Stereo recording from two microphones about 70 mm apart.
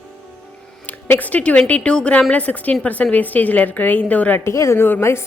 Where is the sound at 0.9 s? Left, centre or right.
Left.